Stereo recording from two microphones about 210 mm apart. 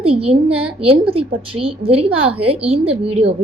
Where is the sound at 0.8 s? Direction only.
25° right (ahead or behind).